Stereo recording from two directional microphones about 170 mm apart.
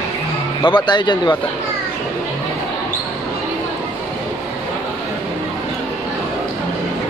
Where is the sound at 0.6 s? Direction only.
25° left (ahead or behind).